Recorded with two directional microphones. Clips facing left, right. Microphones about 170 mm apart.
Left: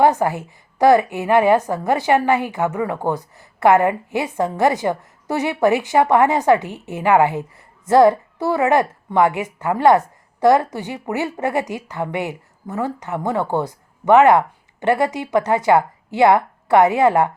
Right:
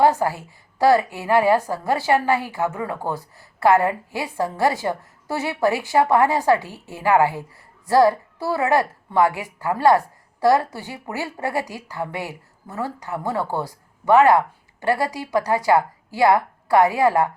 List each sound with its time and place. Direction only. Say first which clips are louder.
0.0 s a woman's voice: left 2 dB; 20° left (ahead or behind)